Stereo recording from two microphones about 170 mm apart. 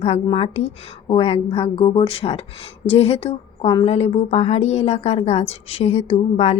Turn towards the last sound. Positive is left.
turn(degrees=40)  # may be behind; listen again after turning